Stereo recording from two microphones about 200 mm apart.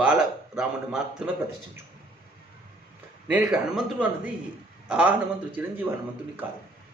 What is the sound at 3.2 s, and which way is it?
Speech, 5° right (ahead or behind).